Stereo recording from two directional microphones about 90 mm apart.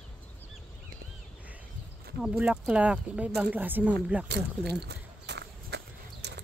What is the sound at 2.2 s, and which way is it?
Speech, 10° right (ahead or behind).